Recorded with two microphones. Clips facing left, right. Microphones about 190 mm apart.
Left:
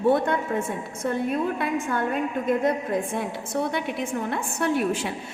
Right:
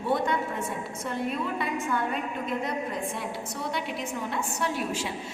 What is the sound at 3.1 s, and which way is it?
A woman's voice, 55° left (ahead or behind).